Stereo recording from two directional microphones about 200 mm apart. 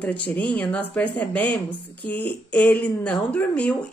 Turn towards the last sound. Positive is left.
turn(degrees=5)  # may be behind; listen again after turning